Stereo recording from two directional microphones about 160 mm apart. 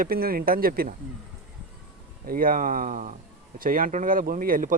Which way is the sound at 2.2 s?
60° right (ahead or behind).